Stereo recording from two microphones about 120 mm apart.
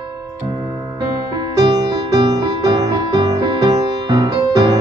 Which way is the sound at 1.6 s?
35° right (ahead or behind).